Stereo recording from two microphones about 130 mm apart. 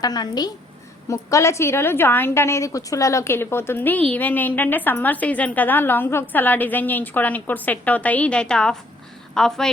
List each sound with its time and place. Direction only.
0.0 s a woman's voice: 30° left (ahead or behind); by 9.6 s 5° left (ahead or behind)